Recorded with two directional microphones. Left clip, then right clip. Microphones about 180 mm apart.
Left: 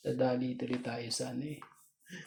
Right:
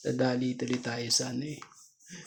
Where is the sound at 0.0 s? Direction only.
45° right (ahead or behind).